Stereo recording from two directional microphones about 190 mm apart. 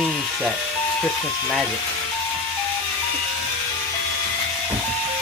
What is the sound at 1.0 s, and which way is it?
Speech, 5° left (ahead or behind).